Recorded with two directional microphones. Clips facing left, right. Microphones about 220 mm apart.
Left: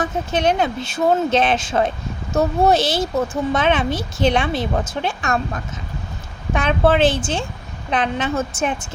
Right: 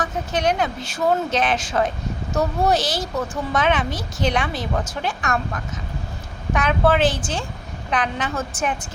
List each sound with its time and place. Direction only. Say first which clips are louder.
0.0 s speech: left 3 dB; 25° left (ahead or behind)
6.5 s speech: left 2 dB; 25° left (ahead or behind)